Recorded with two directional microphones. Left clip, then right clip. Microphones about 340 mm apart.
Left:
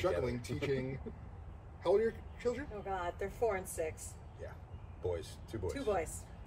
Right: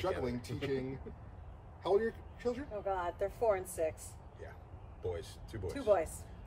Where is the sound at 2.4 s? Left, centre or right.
Centre.